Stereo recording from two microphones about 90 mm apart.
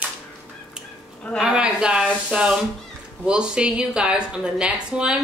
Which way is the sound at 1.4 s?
10° right (ahead or behind).